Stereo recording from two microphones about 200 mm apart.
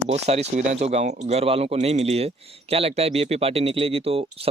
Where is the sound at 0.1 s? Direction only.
35° right (ahead or behind).